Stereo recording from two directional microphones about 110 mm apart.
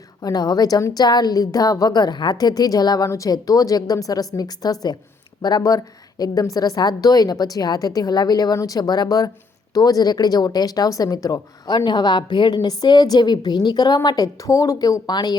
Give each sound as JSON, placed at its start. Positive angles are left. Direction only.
{"t": 0.2, "sound": "a woman's voice", "side_deg": 35}
{"t": 14.4, "sound": "a woman's voice", "side_deg": 30}